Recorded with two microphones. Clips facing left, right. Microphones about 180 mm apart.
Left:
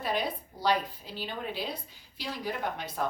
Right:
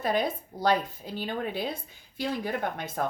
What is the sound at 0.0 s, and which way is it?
A woman's voice, 45° right (ahead or behind).